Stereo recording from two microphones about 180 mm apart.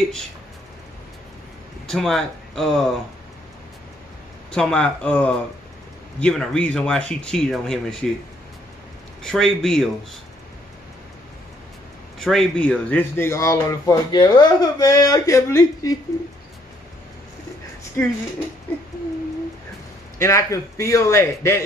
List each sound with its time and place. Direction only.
1.9 s speech: centre (ahead or behind)
4.5 s speech: 5° left (ahead or behind)
9.2 s speech: 5° left (ahead or behind)
12.2 s speech: centre (ahead or behind); by 16.0 s 20° left (ahead or behind)
18.0 s speech: 15° left (ahead or behind)
20.2 s speech: 15° left (ahead or behind)